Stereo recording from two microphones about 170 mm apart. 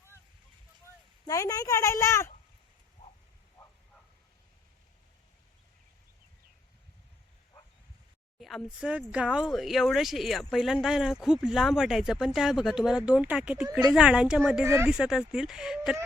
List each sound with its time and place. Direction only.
1.2 s a woman's voice: 20° left (ahead or behind)
8.4 s speech: centre (ahead or behind)
14.6 s speech: 15° right (ahead or behind)
14.8 s speech: 5° right (ahead or behind)